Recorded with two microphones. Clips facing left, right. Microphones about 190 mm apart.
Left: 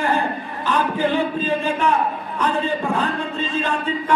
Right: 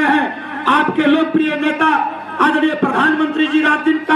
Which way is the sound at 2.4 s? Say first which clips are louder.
Right 8 dB; 75° right (ahead or behind).